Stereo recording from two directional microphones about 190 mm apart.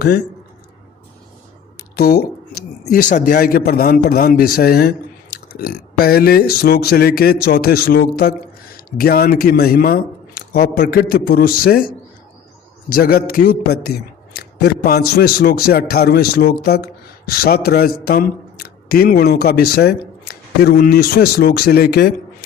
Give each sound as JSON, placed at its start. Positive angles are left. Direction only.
{"t": 2.0, "sound": "speech", "side_deg": 55}
{"t": 12.9, "sound": "a man's voice", "side_deg": 50}